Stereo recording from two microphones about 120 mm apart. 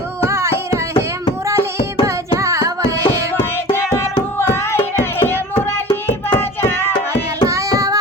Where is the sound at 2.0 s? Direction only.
25° right (ahead or behind).